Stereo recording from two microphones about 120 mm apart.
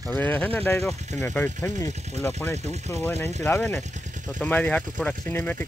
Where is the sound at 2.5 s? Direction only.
65° right (ahead or behind).